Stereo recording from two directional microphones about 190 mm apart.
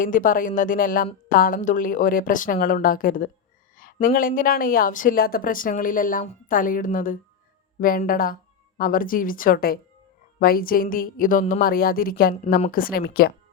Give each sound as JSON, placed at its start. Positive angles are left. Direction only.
{"t": 0.0, "sound": "speech", "side_deg": 45}